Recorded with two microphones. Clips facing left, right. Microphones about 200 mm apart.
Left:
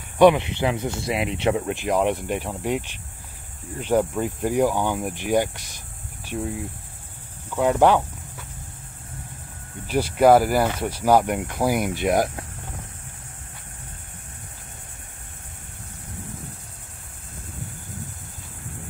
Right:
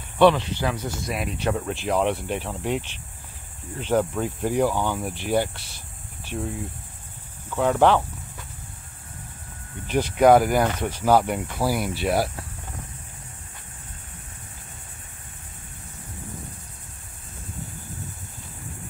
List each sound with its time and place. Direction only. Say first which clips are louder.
0.2 s speech: left 2 dB; 20° left (ahead or behind)
1.6 s speech: left 1 dB; 10° left (ahead or behind)
6.2 s speech: left 2 dB; 5° left (ahead or behind)
9.8 s speech: even; 5° left (ahead or behind)